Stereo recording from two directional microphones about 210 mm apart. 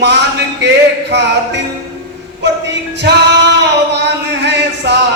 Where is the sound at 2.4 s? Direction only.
55° right (ahead or behind).